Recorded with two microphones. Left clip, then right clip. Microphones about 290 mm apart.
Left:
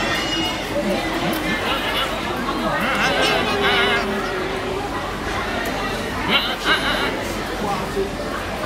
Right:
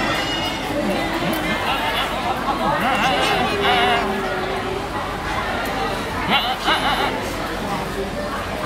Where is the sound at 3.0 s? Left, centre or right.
Right.